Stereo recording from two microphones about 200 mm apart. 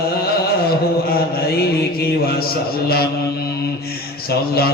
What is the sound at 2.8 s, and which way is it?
Mantra, 50° left (ahead or behind).